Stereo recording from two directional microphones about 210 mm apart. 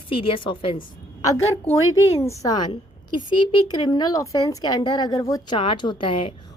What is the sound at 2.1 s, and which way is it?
A woman's voice, 15° left (ahead or behind).